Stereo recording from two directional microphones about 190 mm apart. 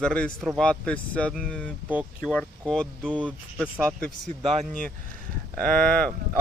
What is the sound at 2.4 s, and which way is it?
Speech, 5° left (ahead or behind).